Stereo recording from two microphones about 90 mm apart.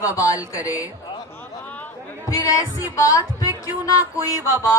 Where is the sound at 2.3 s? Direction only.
40° left (ahead or behind).